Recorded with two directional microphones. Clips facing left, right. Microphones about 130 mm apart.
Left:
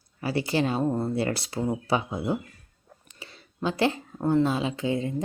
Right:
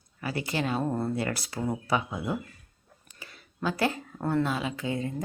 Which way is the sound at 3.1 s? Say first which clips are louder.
Left 2 dB; 25° left (ahead or behind).